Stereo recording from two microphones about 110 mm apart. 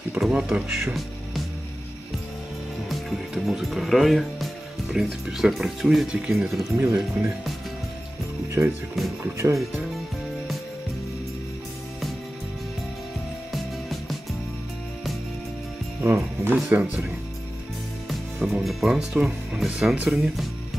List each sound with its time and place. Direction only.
0.2 s speech: 5° right (ahead or behind)
2.9 s speech: centre (ahead or behind)
6.6 s speech: 25° right (ahead or behind)
7.0 s speech: 5° right (ahead or behind)
9.2 s speech: 25° right (ahead or behind)
13.5 s music: centre (ahead or behind)
16.0 s speech: 20° right (ahead or behind)
18.0 s speech: centre (ahead or behind)